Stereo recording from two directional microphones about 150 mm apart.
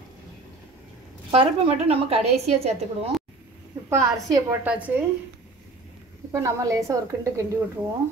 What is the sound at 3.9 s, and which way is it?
A woman's voice, 20° right (ahead or behind).